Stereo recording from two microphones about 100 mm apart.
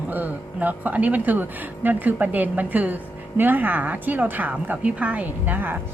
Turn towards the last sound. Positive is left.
turn(degrees=-20)  # may be behind; listen again after turning